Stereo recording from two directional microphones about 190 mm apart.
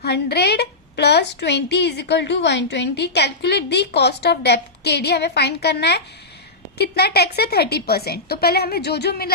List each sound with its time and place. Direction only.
0.0 s a woman's voice: 60° left (ahead or behind)